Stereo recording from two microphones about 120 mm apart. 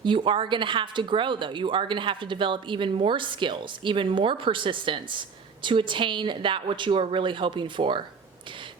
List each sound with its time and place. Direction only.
0.0 s speech: 45° right (ahead or behind)